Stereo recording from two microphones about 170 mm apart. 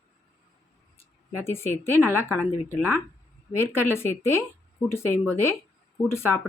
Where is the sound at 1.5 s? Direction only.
15° left (ahead or behind).